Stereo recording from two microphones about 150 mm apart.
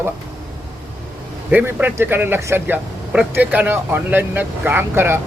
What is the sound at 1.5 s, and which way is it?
Speech, 15° right (ahead or behind).